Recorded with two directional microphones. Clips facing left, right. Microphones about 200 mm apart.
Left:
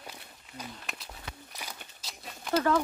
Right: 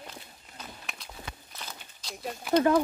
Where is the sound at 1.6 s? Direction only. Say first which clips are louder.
Even; 10° left (ahead or behind).